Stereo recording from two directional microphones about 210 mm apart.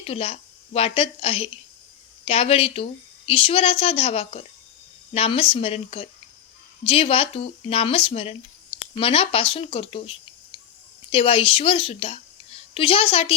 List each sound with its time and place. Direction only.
0.0 s a woman's voice: 25° left (ahead or behind)